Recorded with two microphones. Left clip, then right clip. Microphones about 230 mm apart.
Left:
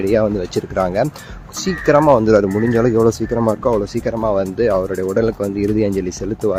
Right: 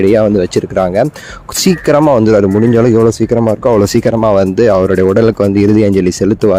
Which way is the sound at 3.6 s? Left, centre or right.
Right.